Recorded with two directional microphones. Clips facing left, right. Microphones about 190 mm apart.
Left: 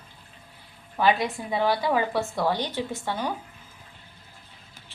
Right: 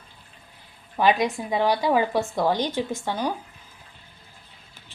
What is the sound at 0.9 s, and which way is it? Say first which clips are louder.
A woman's voice: right 2 dB; 15° right (ahead or behind).